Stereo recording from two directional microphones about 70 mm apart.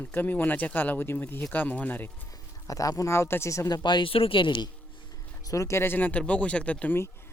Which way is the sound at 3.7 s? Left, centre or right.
Left.